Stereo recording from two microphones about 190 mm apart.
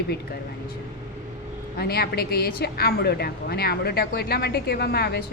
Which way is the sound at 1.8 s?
55° left (ahead or behind).